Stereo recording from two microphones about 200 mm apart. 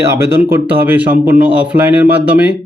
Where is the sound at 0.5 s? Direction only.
10° right (ahead or behind).